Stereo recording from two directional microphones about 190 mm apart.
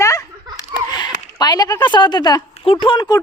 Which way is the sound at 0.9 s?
20° left (ahead or behind).